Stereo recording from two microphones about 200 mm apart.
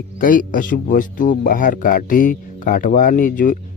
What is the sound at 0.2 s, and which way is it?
Speech, 45° left (ahead or behind).